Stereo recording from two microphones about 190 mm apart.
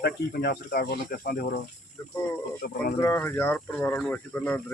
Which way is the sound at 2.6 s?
50° left (ahead or behind).